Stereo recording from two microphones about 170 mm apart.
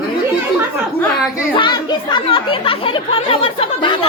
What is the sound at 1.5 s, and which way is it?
Speech, 25° left (ahead or behind).